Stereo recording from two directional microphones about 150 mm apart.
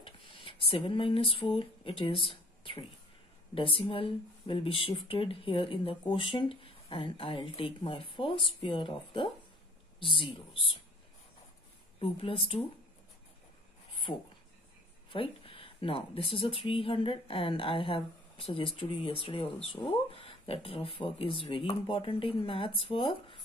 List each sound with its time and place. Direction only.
0.0 s a sound: 35° left (ahead or behind)
1.6 s speech: 35° left (ahead or behind)
12.0 s speech: 40° left (ahead or behind)
15.0 s speech: 35° left (ahead or behind)